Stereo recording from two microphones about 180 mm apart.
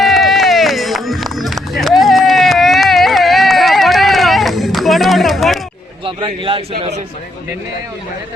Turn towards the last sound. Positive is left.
turn(degrees=-30)  # may be behind; listen again after turning